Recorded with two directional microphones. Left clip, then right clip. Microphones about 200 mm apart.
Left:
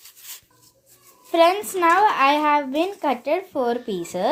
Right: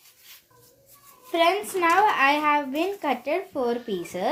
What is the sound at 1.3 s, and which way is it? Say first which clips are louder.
Speech: left 5 dB; 40° left (ahead or behind).